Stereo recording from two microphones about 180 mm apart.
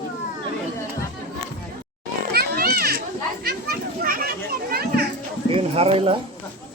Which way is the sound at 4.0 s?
55° right (ahead or behind).